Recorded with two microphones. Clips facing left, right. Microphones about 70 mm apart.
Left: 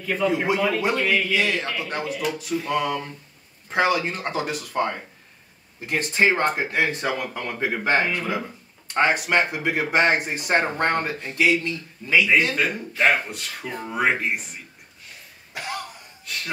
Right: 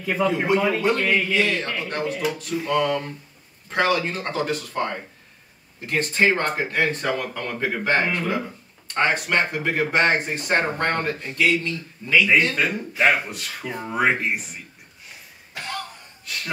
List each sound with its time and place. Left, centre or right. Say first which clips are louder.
0.0 s a man's voice: right 1 dB; centre
0.5 s speech: right 2 dB; centre
15.5 s cough: left 1 dB; centre
16.3 s a sound: even; centre